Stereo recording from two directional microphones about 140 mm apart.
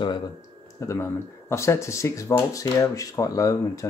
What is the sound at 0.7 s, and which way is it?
Speech, 20° left (ahead or behind).